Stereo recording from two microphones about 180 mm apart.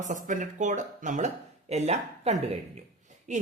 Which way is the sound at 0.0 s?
45° right (ahead or behind).